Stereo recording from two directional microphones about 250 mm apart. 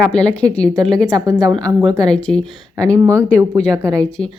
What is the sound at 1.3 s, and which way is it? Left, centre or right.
Speech, centre.